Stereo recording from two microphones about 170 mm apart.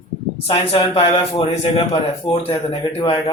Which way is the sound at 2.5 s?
20° left (ahead or behind).